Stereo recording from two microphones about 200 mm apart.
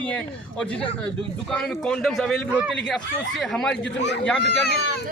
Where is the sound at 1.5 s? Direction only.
5° left (ahead or behind).